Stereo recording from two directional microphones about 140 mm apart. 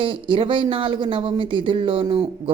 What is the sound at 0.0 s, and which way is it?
Speech, 40° right (ahead or behind).